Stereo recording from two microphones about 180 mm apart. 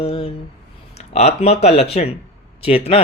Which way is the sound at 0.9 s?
35° left (ahead or behind).